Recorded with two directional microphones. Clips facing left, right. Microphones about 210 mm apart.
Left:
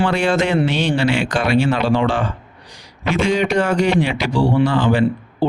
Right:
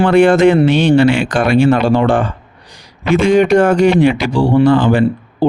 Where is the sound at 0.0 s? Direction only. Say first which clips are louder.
Right 9 dB; 55° right (ahead or behind).